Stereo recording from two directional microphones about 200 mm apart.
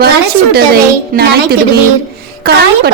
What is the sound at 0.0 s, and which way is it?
A woman's voice, 50° right (ahead or behind).